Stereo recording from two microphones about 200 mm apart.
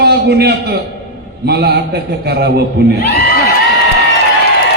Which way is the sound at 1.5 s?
55° right (ahead or behind).